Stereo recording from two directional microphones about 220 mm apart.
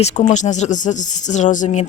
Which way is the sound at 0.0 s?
35° left (ahead or behind).